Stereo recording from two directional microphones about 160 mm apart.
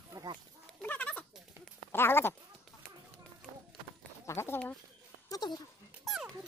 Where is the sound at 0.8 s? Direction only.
10° left (ahead or behind).